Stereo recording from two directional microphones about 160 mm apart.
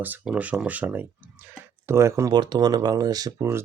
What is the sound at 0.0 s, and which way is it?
Speech, 10° right (ahead or behind).